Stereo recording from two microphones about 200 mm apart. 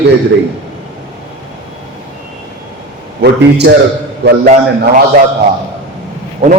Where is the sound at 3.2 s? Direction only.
55° right (ahead or behind).